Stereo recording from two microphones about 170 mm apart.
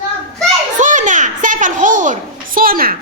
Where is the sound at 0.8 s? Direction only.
45° right (ahead or behind).